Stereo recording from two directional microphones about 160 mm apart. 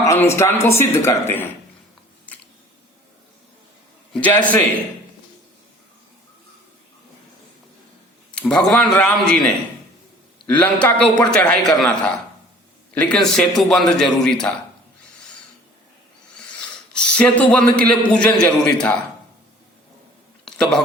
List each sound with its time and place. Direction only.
0.0 s speech: 15° left (ahead or behind)
4.1 s speech: 10° left (ahead or behind)
8.4 s a man's voice: 5° left (ahead or behind)
16.6 s a man's voice: 5° left (ahead or behind)
20.4 s a sound: 5° left (ahead or behind)